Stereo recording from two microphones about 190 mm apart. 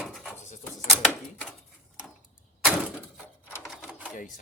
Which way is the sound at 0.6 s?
5° left (ahead or behind).